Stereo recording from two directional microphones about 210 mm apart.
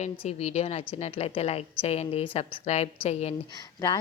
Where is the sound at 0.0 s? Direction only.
30° left (ahead or behind).